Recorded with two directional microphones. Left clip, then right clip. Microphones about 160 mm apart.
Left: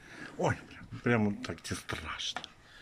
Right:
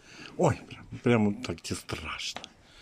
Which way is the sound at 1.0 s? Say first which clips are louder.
Right 4 dB; 15° right (ahead or behind).